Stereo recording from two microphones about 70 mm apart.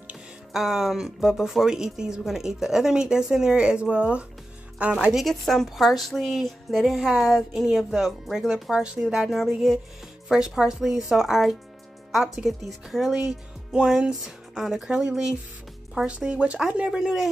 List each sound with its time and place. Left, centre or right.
0.5 s a woman's voice: centre
5.1 s a woman's voice: centre